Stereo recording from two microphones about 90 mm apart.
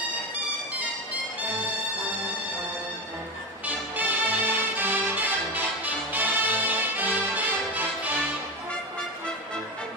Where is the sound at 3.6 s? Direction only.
20° right (ahead or behind).